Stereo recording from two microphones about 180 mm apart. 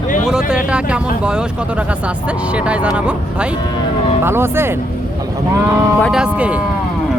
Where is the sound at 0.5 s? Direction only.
5° right (ahead or behind).